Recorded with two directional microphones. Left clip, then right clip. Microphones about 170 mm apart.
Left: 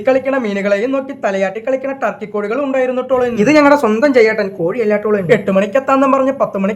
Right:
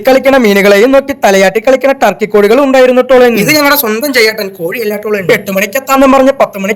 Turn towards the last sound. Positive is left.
turn(degrees=-35)  # may be behind; listen again after turning